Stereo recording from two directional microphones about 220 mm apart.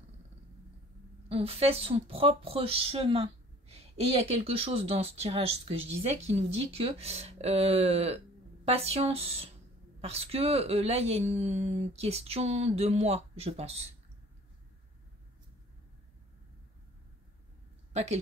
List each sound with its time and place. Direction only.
1.3 s speech: 25° right (ahead or behind)
17.9 s speech: 30° right (ahead or behind)